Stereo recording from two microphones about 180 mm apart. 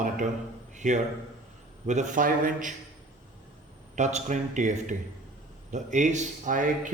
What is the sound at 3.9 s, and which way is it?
Speech, 40° right (ahead or behind).